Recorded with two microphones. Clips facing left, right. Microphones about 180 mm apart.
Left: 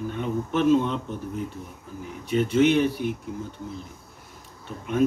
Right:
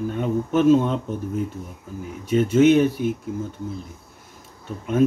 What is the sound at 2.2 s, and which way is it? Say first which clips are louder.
Speech: right 4 dB; 45° right (ahead or behind).